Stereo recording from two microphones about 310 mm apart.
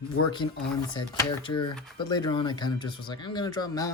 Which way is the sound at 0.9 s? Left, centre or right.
Centre.